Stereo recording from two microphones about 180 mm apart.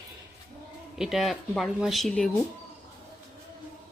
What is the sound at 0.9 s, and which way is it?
Speech, centre (ahead or behind).